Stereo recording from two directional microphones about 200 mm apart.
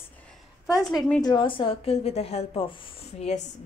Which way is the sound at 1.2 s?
25° left (ahead or behind).